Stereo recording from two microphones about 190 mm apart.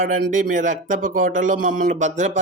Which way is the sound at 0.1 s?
45° right (ahead or behind).